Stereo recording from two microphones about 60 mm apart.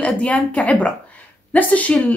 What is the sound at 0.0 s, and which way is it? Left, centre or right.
Speech, left.